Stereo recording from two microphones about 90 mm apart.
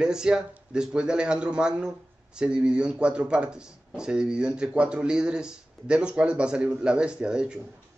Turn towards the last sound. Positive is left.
turn(degrees=-10)  # may be behind; listen again after turning